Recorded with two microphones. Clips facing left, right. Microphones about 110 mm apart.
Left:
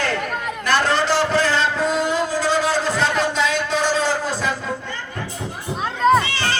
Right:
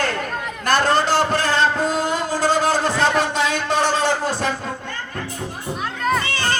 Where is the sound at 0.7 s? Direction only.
45° right (ahead or behind).